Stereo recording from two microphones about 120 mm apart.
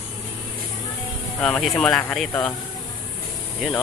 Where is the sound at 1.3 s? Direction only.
5° left (ahead or behind).